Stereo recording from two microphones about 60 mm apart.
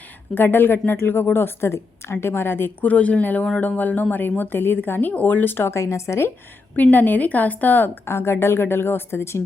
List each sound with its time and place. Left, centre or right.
0.3 s speech: left
6.7 s a woman's voice: left
8.0 s a woman's voice: left